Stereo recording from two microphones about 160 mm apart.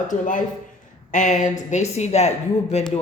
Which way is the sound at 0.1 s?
55° left (ahead or behind).